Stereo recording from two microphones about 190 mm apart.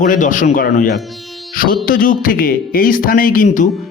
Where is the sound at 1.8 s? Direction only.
50° left (ahead or behind).